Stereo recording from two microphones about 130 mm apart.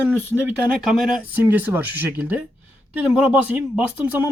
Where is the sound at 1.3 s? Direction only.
15° right (ahead or behind).